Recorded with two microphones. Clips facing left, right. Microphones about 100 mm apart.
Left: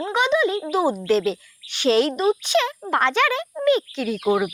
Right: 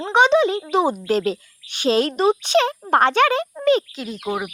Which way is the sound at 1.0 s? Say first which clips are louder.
Left 1 dB; 45° right (ahead or behind).